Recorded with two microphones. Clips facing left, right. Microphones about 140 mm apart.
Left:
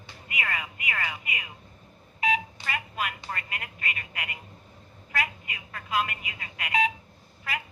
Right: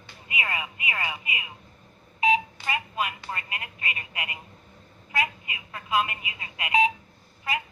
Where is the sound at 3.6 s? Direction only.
30° right (ahead or behind).